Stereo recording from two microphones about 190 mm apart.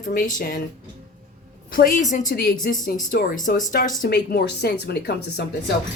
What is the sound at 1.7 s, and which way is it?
Speech, 45° left (ahead or behind).